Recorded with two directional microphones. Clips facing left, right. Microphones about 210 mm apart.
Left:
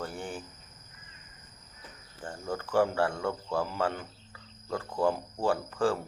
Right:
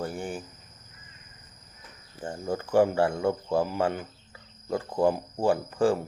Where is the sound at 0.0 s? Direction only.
10° right (ahead or behind).